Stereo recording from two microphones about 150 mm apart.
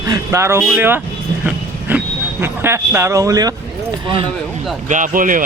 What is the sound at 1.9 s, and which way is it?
Vehicle, 10° right (ahead or behind).